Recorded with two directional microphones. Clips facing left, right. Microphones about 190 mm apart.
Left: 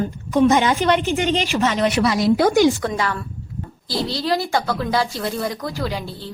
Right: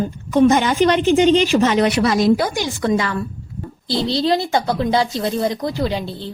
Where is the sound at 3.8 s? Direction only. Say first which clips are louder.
Right 5 dB; 25° right (ahead or behind).